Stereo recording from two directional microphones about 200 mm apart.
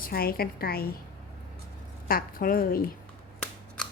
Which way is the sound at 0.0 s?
50° left (ahead or behind).